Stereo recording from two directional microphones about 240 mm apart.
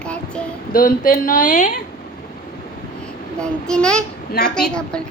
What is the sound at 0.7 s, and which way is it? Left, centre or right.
Speech, left.